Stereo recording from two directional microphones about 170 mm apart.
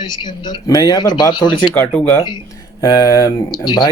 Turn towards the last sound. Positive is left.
turn(degrees=25)  # may be behind; listen again after turning